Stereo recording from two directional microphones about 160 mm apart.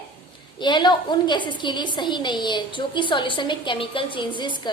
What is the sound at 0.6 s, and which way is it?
A woman's voice, 30° left (ahead or behind).